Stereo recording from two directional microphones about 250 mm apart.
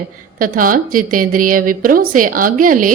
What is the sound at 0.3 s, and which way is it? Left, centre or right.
A woman's voice, right.